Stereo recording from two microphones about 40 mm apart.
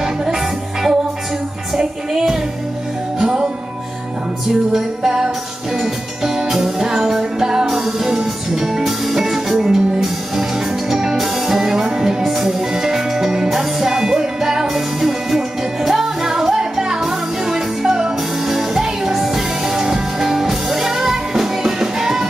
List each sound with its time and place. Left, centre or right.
0.0 s music: centre
4.7 s music: centre